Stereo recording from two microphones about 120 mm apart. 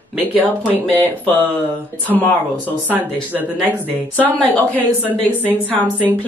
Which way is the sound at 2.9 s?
15° right (ahead or behind).